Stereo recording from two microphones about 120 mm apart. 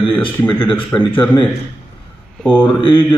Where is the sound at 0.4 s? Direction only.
15° left (ahead or behind).